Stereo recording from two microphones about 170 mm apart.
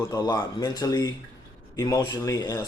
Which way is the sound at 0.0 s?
20° left (ahead or behind).